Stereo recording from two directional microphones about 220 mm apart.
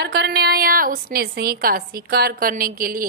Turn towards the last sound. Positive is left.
turn(degrees=-40)  # may be behind; listen again after turning